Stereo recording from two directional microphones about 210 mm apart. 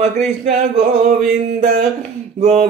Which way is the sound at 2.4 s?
30° right (ahead or behind).